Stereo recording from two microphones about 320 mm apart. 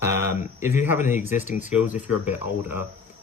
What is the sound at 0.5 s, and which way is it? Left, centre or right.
Speech, centre.